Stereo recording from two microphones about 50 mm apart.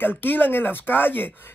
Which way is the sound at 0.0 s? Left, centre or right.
Left.